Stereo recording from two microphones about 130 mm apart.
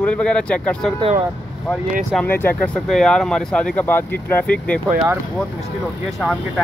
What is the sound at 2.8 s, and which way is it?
Speech, 5° left (ahead or behind).